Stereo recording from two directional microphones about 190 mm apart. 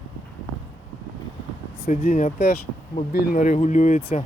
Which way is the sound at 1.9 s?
45° left (ahead or behind).